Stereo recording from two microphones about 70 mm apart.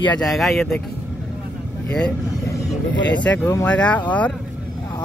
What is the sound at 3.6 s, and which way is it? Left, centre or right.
Speech, centre.